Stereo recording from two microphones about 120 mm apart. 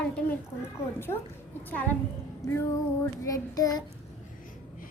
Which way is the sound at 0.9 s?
20° left (ahead or behind).